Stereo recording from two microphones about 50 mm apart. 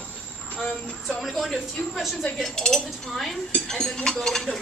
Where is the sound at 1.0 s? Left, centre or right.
Centre.